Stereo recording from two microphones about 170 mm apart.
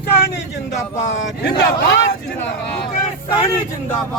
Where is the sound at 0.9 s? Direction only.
45° left (ahead or behind).